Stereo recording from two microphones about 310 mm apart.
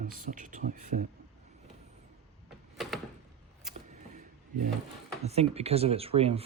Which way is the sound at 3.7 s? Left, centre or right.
Right.